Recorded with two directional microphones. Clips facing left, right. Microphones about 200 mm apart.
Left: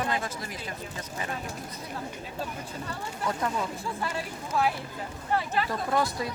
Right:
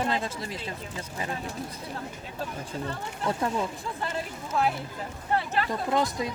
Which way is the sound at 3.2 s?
25° right (ahead or behind).